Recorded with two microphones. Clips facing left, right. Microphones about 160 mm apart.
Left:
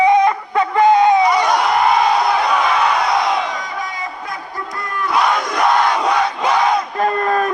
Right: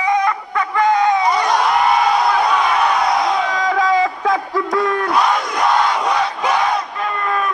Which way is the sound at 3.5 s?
90° right.